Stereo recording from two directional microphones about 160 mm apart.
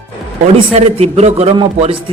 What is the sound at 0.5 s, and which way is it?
Speech, 40° right (ahead or behind).